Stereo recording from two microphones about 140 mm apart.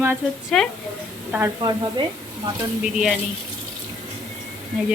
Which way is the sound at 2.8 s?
5° right (ahead or behind).